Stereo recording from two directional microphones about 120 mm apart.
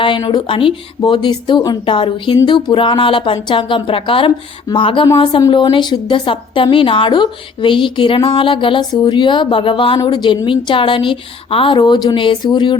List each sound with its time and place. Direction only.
0.0 s speech: 40° left (ahead or behind)
10.0 s a woman's voice: 30° left (ahead or behind)